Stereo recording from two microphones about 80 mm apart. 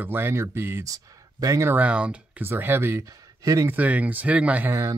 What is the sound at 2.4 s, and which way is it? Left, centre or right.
Speech, right.